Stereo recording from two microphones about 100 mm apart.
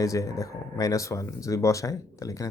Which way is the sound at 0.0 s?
35° left (ahead or behind).